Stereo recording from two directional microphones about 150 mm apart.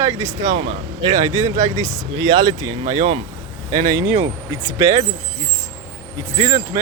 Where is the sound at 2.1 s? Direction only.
35° right (ahead or behind).